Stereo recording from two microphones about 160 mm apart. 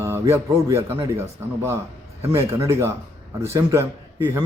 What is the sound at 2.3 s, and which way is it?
Speech, 15° right (ahead or behind).